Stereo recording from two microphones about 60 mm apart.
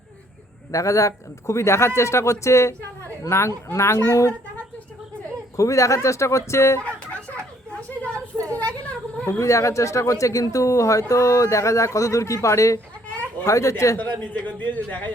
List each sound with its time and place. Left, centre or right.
0.7 s a man's voice: left
5.5 s a man's voice: left
6.8 s a sound: left
8.4 s a sound: left
9.4 s a man's voice: left
13.9 s a man's voice: left